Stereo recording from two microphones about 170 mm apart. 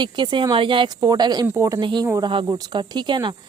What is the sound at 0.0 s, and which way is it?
Speech, 30° right (ahead or behind).